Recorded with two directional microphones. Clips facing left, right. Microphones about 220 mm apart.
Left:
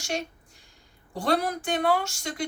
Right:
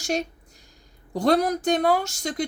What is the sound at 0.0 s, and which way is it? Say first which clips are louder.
A woman's voice: right 5 dB; 40° right (ahead or behind).